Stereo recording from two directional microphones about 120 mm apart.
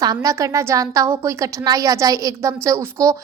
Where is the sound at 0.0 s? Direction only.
30° right (ahead or behind).